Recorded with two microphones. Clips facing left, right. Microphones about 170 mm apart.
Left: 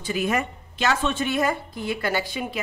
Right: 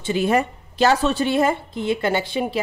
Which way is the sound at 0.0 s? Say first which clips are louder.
Right 5 dB; 30° right (ahead or behind).